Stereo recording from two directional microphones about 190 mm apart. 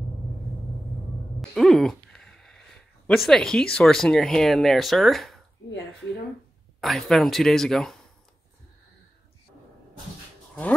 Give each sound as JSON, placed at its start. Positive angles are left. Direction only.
{"t": 1.5, "sound": "a sound", "side_deg": 0}
{"t": 3.7, "sound": "speech", "side_deg": 0}
{"t": 6.8, "sound": "speech", "side_deg": 0}